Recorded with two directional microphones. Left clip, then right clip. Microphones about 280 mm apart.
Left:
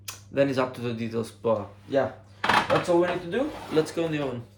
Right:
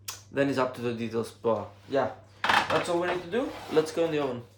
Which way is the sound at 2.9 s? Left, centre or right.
Centre.